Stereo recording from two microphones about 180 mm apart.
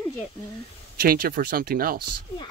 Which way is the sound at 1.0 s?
55° right (ahead or behind).